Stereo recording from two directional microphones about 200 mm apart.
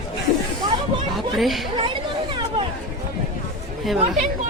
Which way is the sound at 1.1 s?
Centre (ahead or behind).